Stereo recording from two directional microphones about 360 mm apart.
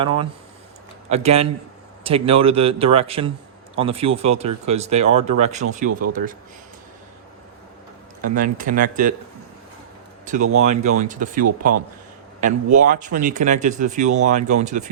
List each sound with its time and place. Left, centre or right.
1.1 s speech: centre
8.2 s speech: right
10.2 s speech: right